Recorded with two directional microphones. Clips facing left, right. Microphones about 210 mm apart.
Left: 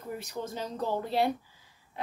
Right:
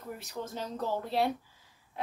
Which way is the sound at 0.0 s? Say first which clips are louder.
Left 3 dB; centre (ahead or behind).